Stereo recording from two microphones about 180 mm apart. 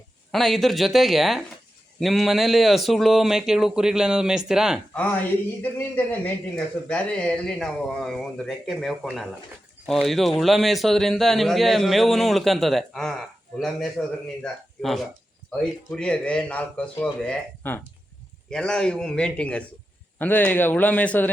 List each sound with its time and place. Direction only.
0.3 s a man's voice: centre (ahead or behind)
5.7 s a man's voice: 10° left (ahead or behind)